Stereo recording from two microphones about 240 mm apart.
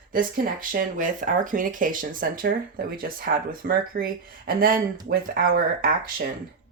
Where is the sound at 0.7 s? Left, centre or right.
Right.